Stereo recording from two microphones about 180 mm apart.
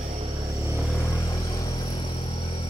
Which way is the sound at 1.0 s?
15° left (ahead or behind).